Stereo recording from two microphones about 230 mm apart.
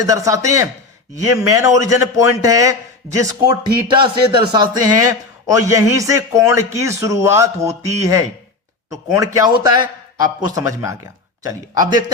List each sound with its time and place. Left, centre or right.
0.0 s a man's voice: centre